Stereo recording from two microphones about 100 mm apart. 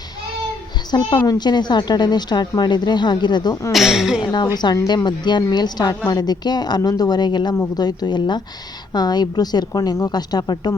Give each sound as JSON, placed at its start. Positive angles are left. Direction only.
{"t": 0.9, "sound": "a woman's voice", "side_deg": 45}
{"t": 3.7, "sound": "a woman's voice", "side_deg": -5}
{"t": 4.2, "sound": "a woman's voice", "side_deg": 45}